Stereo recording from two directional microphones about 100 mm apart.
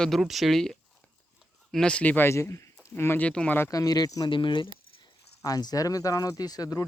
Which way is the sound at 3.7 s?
40° left (ahead or behind).